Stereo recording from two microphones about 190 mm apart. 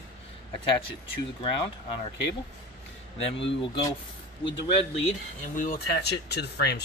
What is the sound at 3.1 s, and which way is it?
Speech, 35° left (ahead or behind).